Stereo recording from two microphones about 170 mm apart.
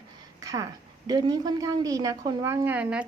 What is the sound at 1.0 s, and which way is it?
A woman's voice, 25° right (ahead or behind).